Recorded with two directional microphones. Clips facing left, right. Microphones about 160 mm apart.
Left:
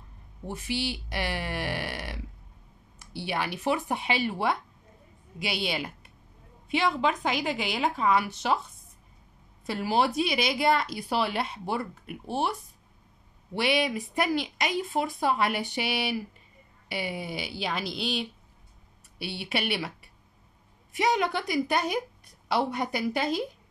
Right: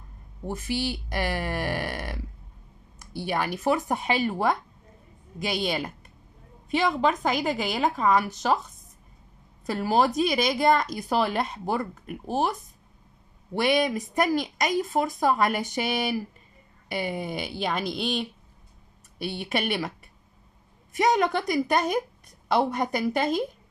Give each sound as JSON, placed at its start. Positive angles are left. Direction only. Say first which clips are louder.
{"t": 0.5, "sound": "speech", "louder": "right 3 dB", "side_deg": -45}
{"t": 20.9, "sound": "speech", "louder": "right 3 dB", "side_deg": -45}